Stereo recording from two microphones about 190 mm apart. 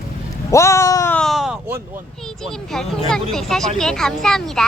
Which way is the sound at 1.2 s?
Centre (ahead or behind).